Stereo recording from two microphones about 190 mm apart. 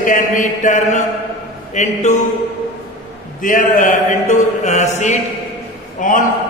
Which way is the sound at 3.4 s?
45° left (ahead or behind).